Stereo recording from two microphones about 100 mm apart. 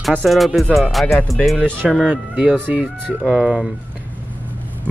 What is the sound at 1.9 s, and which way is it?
Speech, 10° right (ahead or behind).